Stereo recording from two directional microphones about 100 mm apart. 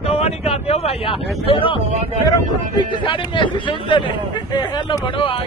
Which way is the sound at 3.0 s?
55° left (ahead or behind).